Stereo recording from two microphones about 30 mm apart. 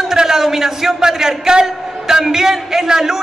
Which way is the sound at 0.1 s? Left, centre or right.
Centre.